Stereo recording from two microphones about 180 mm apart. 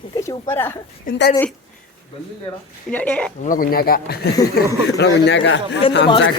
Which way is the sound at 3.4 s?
50° left (ahead or behind).